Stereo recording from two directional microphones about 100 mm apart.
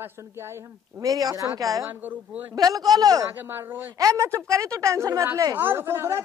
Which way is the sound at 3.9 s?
35° right (ahead or behind).